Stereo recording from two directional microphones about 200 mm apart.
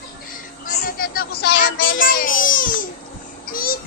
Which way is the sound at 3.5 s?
45° left (ahead or behind).